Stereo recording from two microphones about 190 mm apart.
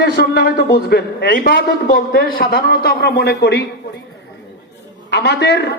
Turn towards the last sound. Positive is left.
turn(degrees=65)  # may be behind; listen again after turning